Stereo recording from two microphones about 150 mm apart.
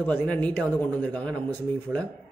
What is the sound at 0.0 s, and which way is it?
A man's voice, 10° left (ahead or behind).